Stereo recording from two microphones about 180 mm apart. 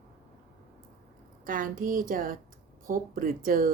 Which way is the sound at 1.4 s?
50° right (ahead or behind).